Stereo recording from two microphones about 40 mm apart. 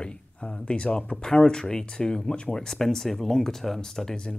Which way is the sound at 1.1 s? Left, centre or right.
Centre.